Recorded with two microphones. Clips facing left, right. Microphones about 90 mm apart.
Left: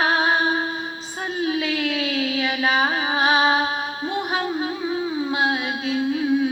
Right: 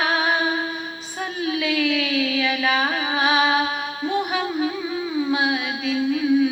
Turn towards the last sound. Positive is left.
turn(degrees=45)  # may be behind; listen again after turning